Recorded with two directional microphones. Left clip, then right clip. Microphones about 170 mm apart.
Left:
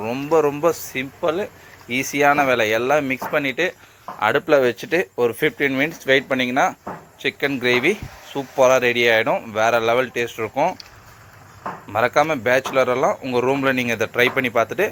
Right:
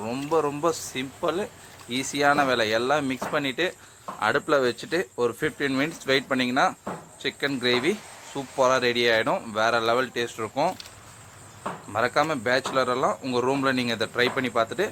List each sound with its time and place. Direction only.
0.0 s a man's voice: 5° left (ahead or behind)
0.3 s speech: 15° left (ahead or behind)
11.9 s speech: 5° left (ahead or behind)